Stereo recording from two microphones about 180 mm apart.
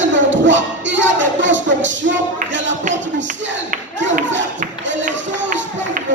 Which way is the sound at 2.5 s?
90° right.